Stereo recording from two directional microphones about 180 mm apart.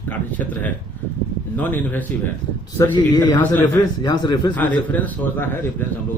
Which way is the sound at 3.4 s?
10° left (ahead or behind).